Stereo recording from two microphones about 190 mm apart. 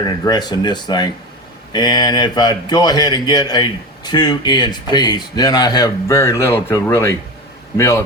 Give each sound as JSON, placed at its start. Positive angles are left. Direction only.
{"t": 0.0, "sound": "a man's voice", "side_deg": 20}